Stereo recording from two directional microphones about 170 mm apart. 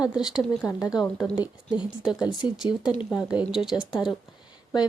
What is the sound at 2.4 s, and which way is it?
Speech, 30° left (ahead or behind).